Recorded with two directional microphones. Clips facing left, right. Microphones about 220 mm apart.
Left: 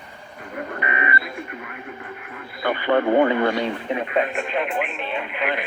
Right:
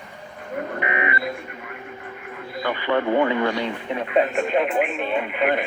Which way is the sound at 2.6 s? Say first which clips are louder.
Left 3 dB; 45° left (ahead or behind).